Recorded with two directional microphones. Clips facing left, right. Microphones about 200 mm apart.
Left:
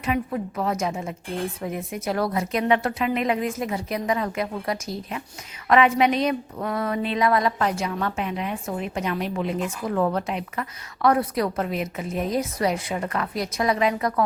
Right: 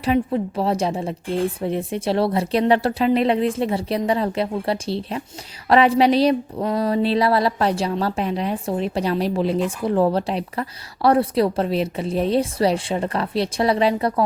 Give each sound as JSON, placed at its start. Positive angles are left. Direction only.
{"t": 0.0, "sound": "a woman's voice", "side_deg": -30}
{"t": 6.6, "sound": "a woman's voice", "side_deg": -25}